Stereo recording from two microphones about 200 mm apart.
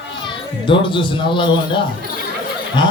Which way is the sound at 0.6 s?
25° left (ahead or behind).